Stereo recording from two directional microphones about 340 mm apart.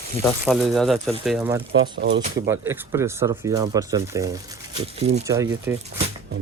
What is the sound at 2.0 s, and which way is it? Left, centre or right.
Speech, right.